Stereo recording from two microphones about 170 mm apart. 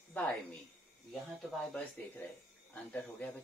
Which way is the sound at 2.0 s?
10° left (ahead or behind).